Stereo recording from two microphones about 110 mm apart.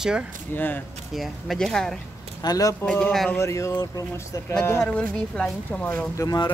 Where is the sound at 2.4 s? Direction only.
35° left (ahead or behind).